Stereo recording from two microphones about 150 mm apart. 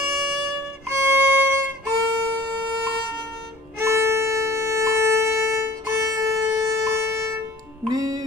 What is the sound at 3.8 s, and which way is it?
Music, 20° right (ahead or behind).